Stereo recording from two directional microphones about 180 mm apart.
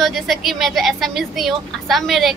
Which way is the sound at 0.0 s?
Centre (ahead or behind).